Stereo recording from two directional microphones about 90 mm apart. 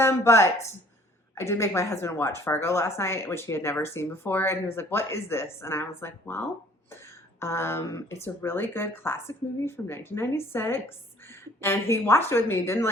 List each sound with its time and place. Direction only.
0.0 s speech: 30° left (ahead or behind)